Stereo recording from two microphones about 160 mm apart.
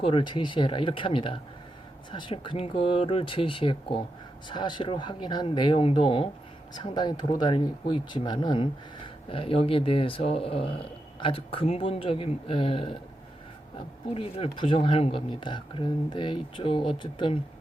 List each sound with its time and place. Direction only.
0.0 s speech: 35° left (ahead or behind)